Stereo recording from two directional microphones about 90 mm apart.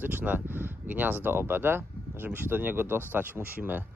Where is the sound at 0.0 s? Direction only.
20° right (ahead or behind).